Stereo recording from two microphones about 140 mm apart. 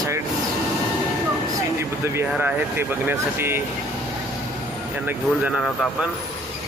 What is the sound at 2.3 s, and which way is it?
Speech, 10° right (ahead or behind).